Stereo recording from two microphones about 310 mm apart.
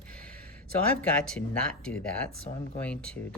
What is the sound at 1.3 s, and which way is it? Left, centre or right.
Speech, centre.